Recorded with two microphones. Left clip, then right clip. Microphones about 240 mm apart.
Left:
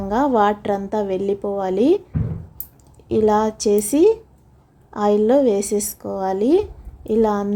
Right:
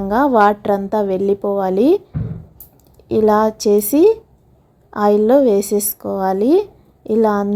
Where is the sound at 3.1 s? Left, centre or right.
Centre.